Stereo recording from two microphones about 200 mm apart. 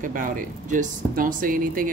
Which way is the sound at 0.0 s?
40° right (ahead or behind).